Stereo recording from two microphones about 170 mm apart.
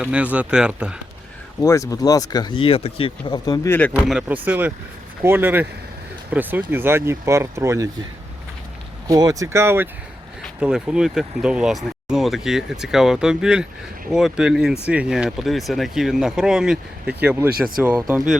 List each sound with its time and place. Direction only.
0.0 s speech: 10° right (ahead or behind)
1.6 s speech: 20° left (ahead or behind)
3.7 s speech: 10° left (ahead or behind)
3.9 s speech: 10° right (ahead or behind)
9.0 s speech: 20° right (ahead or behind)